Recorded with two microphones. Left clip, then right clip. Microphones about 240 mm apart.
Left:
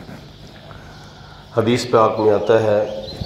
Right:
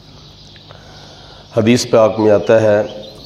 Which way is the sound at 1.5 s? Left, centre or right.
Right.